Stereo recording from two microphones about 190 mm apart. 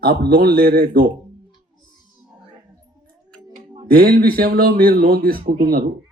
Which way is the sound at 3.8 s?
50° right (ahead or behind).